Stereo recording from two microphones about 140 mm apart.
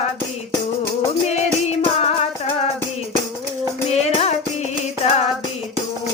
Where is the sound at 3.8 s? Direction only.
50° left (ahead or behind).